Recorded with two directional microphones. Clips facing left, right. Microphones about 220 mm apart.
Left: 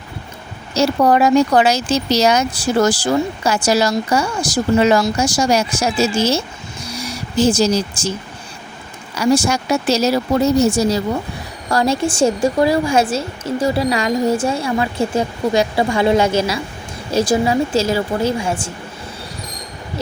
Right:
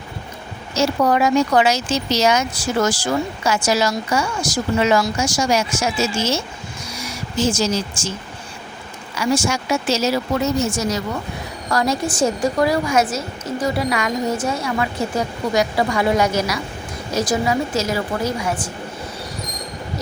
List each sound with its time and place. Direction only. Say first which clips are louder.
0.7 s speech: left 3 dB; 35° left (ahead or behind)
9.1 s a woman's voice: left 4 dB; 35° left (ahead or behind)